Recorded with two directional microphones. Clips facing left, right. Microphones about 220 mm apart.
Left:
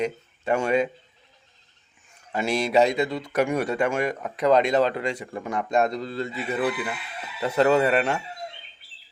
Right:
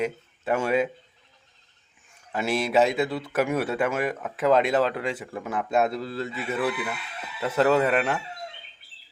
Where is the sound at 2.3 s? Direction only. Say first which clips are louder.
Left 1 dB; centre (ahead or behind).